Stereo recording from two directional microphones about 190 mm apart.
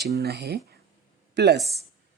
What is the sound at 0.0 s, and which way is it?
Speech, 60° right (ahead or behind).